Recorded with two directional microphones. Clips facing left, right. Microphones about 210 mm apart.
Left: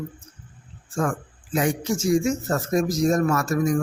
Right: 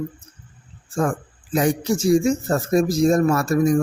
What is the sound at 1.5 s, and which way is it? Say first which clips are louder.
Speech: right 3 dB; 35° right (ahead or behind).